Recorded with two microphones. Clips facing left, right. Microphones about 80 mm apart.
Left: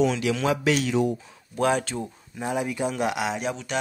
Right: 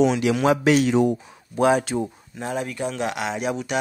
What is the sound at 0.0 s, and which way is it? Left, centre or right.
Speech, centre.